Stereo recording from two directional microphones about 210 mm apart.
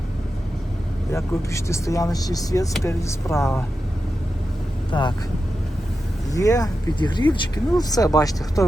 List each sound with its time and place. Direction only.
1.1 s speech: 15° left (ahead or behind)
4.9 s speech: 20° left (ahead or behind)
6.3 s speech: 15° left (ahead or behind)